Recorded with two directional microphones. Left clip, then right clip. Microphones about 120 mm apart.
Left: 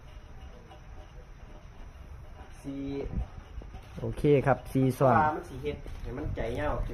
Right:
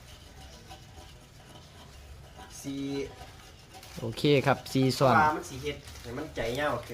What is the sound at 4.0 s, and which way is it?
Speech, 10° right (ahead or behind).